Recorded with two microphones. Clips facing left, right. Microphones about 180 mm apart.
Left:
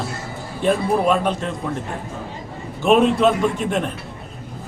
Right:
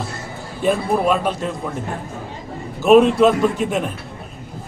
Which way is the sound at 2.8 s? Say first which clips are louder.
Right 3 dB; centre (ahead or behind).